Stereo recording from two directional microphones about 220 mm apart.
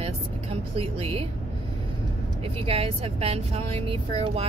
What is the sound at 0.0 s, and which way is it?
Vehicle, 25° right (ahead or behind).